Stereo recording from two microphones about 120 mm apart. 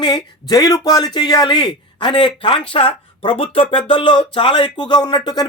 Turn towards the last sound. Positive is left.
turn(degrees=35)  # may be behind; listen again after turning